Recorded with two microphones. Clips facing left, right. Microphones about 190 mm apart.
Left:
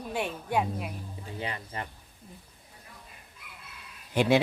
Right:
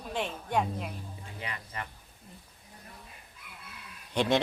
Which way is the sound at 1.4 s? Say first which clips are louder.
Left 4 dB; 30° left (ahead or behind).